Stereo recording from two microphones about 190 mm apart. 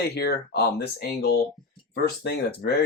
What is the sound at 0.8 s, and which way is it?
Speech, 55° left (ahead or behind).